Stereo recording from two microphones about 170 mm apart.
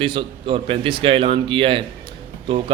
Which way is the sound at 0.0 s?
30° right (ahead or behind).